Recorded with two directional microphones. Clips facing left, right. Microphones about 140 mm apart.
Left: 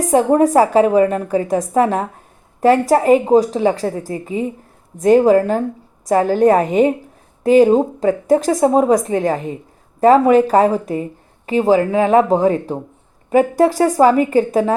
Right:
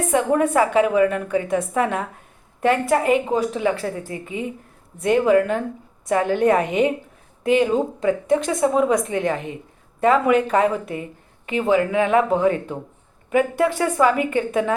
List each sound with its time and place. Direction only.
0.0 s a woman's voice: 35° left (ahead or behind)